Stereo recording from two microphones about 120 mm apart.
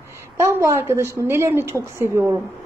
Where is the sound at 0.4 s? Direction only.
25° right (ahead or behind).